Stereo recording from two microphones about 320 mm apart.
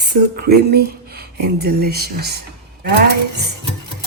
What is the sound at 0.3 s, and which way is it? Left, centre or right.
Speech, right.